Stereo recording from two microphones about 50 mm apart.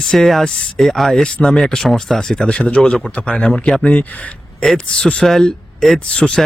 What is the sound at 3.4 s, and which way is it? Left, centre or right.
Speech, centre.